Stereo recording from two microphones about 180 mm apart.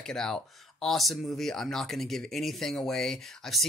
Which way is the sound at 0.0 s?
5° left (ahead or behind).